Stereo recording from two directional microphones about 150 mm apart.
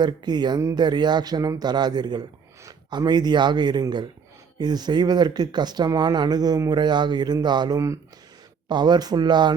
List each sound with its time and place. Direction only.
0.0 s speech: 30° right (ahead or behind)